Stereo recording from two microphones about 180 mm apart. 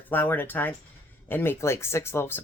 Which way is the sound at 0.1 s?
10° left (ahead or behind).